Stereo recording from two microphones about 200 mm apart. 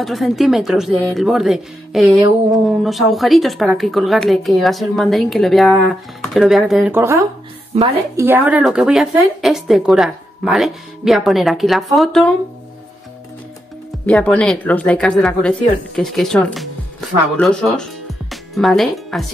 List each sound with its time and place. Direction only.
0.0 s speech: centre (ahead or behind)
7.7 s a woman's voice: 30° right (ahead or behind)
8.2 s speech: 10° right (ahead or behind)
14.0 s speech: 5° left (ahead or behind)